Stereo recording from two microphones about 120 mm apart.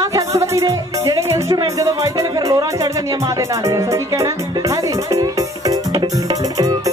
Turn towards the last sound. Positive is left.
turn(degrees=-30)  # may be behind; listen again after turning